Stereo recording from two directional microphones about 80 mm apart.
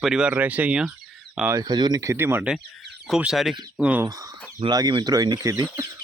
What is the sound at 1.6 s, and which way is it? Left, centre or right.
Speech, right.